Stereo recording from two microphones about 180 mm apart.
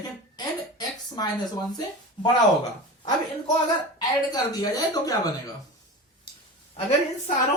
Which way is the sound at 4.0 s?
20° left (ahead or behind).